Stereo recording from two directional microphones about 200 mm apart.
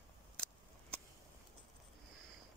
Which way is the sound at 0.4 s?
5° left (ahead or behind).